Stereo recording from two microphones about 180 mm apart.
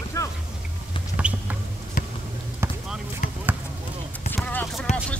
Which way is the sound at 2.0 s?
50° left (ahead or behind).